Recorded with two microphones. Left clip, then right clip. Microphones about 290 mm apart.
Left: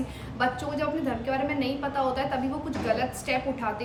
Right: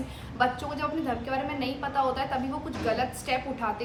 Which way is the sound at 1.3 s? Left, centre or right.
Centre.